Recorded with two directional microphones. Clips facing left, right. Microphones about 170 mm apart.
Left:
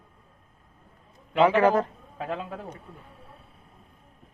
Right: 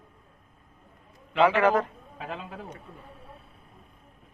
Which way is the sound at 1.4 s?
30° left (ahead or behind).